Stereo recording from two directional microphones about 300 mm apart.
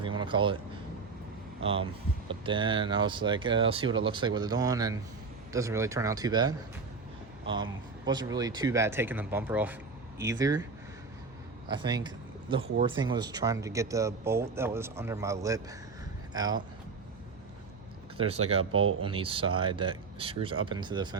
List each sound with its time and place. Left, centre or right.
0.2 s speech: centre
1.6 s speech: centre
11.7 s speech: centre
18.2 s speech: centre
18.7 s speech: right
19.0 s speech: centre